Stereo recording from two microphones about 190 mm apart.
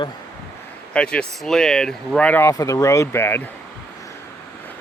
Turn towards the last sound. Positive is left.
turn(degrees=10)  # may be behind; listen again after turning